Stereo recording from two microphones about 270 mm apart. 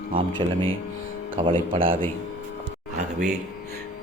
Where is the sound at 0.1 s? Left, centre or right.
Centre.